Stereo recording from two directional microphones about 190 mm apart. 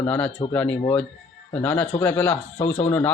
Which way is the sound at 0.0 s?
10° left (ahead or behind).